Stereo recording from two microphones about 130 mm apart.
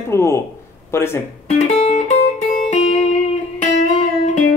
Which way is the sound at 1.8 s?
55° left (ahead or behind).